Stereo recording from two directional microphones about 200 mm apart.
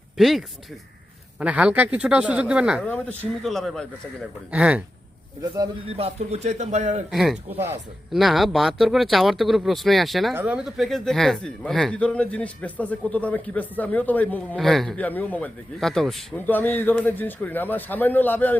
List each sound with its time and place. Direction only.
0.2 s speech: centre (ahead or behind)
2.8 s speech: 10° left (ahead or behind)
6.0 s speech: 35° right (ahead or behind)
7.1 s speech: centre (ahead or behind)